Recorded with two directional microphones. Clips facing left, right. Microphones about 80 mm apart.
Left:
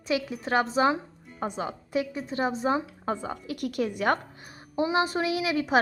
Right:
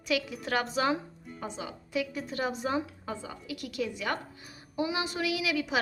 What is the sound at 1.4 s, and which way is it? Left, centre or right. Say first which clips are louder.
Speech: left 7 dB; left.